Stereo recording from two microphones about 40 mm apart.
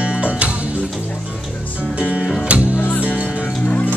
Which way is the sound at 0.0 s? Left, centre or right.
Right.